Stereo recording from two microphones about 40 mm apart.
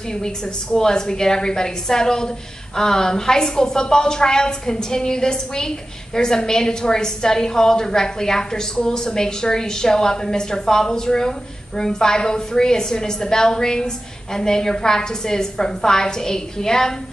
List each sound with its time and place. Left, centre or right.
0.1 s a woman's voice: centre